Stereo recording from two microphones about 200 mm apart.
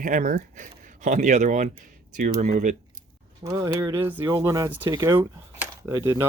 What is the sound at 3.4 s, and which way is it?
Speech, 20° right (ahead or behind).